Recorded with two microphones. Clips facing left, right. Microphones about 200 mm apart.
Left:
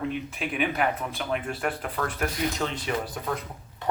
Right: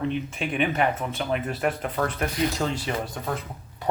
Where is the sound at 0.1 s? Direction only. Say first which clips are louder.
Right 3 dB; 5° left (ahead or behind).